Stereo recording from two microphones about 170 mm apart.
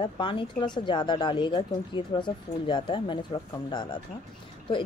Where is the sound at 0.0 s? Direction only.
30° left (ahead or behind).